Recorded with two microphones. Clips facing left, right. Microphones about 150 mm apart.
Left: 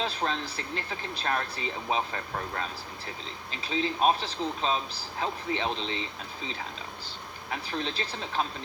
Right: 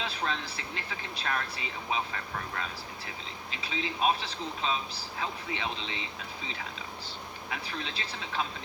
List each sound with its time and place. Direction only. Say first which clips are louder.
0.0 s speech: left 3 dB; 35° left (ahead or behind)
7.5 s speech: left 5 dB; 35° left (ahead or behind)